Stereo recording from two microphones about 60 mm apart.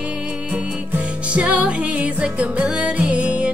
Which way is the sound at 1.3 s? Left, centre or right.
Centre.